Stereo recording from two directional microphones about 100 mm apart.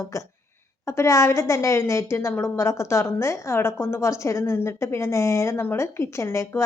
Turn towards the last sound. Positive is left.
turn(degrees=25)  # may be behind; listen again after turning